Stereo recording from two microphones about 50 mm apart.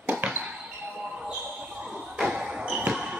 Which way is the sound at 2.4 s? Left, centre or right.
Centre.